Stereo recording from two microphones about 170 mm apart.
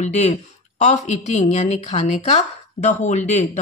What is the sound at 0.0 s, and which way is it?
A woman's voice, 40° left (ahead or behind).